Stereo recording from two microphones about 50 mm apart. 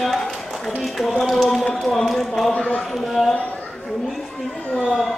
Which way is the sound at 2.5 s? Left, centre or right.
Left.